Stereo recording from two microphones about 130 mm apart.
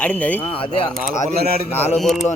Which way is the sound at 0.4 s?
45° left (ahead or behind).